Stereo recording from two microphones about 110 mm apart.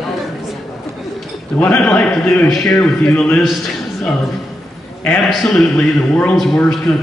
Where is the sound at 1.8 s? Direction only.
10° left (ahead or behind).